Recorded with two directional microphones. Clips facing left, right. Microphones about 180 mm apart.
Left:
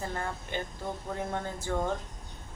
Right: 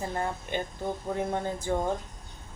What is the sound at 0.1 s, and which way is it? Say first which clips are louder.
A woman's voice: right 4 dB; 20° right (ahead or behind).